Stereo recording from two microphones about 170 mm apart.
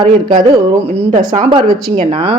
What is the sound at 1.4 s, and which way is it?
Speech, 30° right (ahead or behind).